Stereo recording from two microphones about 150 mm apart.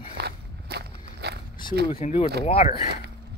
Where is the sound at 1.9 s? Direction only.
45° left (ahead or behind).